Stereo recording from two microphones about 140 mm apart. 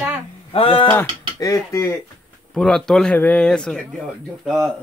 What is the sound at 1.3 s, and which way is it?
Speech, 20° left (ahead or behind).